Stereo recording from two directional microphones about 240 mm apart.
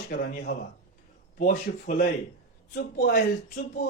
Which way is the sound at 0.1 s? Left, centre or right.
Left.